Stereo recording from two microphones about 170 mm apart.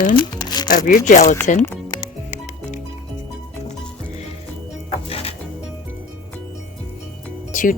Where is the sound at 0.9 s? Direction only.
50° left (ahead or behind).